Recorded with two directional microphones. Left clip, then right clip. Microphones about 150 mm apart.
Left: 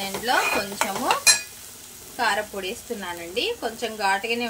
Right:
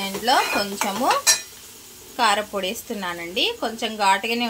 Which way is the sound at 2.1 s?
75° right (ahead or behind).